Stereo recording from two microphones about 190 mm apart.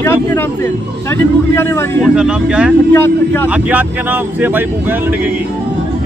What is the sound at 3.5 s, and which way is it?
Speech, 10° right (ahead or behind).